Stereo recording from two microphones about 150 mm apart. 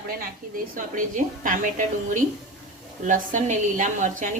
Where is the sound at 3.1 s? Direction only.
55° right (ahead or behind).